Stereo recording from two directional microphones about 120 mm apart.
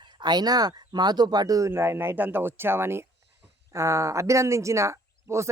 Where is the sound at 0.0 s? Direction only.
40° right (ahead or behind).